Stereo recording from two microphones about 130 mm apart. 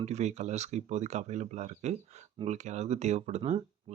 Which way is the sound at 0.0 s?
60° right (ahead or behind).